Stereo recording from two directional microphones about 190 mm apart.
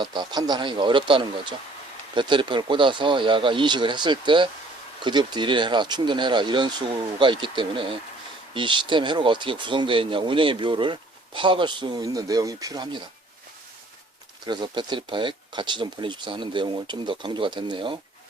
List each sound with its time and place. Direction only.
0.0 s speech: 25° right (ahead or behind)
14.4 s speech: 25° right (ahead or behind)